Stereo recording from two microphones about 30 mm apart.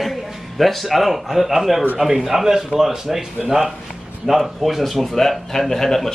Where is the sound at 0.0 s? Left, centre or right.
Centre.